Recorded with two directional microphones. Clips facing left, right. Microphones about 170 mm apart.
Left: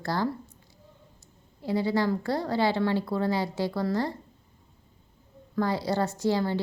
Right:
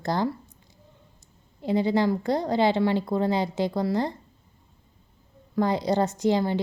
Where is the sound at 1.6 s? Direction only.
20° right (ahead or behind).